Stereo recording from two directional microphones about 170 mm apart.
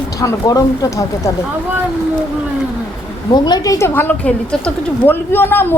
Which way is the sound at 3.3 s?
25° left (ahead or behind).